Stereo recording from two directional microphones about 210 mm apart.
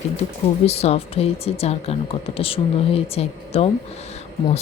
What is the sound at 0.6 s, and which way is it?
A woman's voice, 30° left (ahead or behind).